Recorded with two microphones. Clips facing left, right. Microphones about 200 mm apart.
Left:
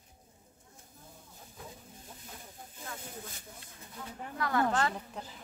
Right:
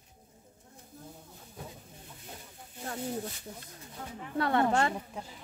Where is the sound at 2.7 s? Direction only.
45° right (ahead or behind).